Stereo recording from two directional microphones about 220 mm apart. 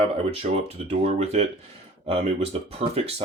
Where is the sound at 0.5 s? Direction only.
30° right (ahead or behind).